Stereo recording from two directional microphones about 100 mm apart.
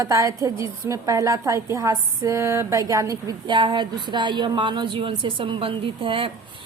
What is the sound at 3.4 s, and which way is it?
Speech, 50° right (ahead or behind).